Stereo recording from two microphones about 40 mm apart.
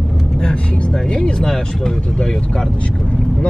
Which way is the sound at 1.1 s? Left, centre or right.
Centre.